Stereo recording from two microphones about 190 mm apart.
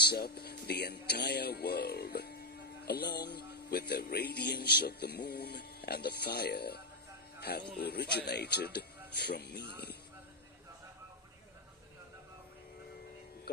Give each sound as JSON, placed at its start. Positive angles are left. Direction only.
{"t": 0.0, "sound": "speech", "side_deg": 55}